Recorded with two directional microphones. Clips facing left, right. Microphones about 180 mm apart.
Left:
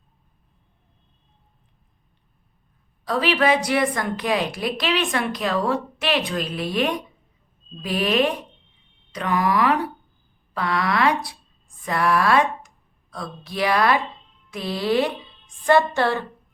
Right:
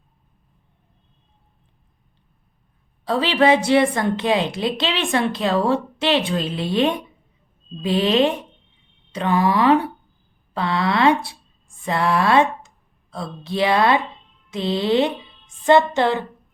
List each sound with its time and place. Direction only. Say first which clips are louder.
3.0 s a woman's voice: right 3 dB; 30° right (ahead or behind)